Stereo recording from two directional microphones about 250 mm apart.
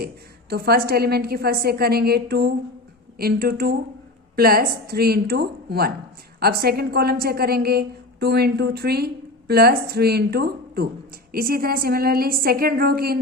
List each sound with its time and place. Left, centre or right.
0.5 s a woman's voice: right